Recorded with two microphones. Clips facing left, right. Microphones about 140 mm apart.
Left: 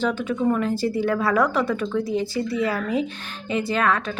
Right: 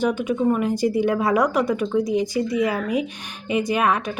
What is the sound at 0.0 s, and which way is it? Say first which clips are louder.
Speech: right 2 dB; 15° right (ahead or behind).